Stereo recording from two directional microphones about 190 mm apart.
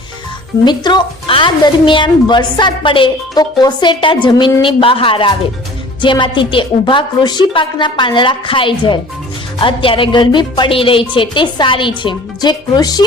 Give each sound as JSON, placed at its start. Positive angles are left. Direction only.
{"t": 0.6, "sound": "a woman's voice", "side_deg": 25}